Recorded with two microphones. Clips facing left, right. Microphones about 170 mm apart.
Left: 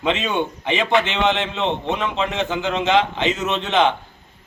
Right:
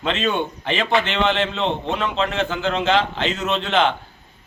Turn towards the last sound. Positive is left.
turn(degrees=15)  # may be behind; listen again after turning